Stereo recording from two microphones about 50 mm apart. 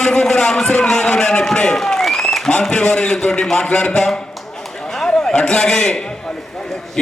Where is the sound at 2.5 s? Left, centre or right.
Centre.